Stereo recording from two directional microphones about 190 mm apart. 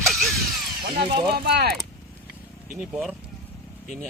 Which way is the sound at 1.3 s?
60° right (ahead or behind).